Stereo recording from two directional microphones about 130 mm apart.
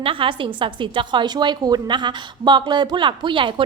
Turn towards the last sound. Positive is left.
turn(degrees=-40)  # may be behind; listen again after turning